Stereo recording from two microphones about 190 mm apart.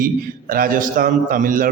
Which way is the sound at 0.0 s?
50° right (ahead or behind).